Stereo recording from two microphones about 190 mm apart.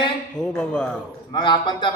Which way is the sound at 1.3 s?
25° left (ahead or behind).